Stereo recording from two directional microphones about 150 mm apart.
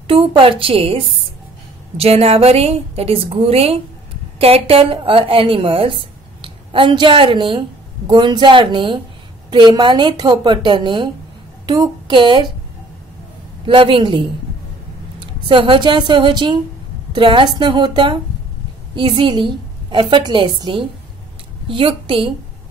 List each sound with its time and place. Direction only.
0.0 s a woman's voice: 35° right (ahead or behind)
13.7 s a woman's voice: 35° right (ahead or behind)